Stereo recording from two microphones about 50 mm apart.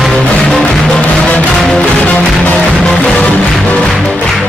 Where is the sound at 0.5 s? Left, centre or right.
Centre.